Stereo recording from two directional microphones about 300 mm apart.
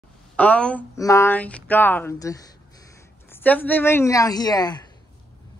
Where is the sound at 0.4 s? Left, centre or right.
Centre.